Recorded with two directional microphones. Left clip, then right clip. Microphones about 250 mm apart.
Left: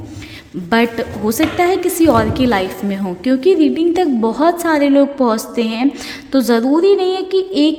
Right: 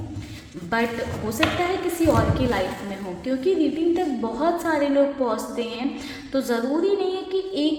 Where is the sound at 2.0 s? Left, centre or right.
Left.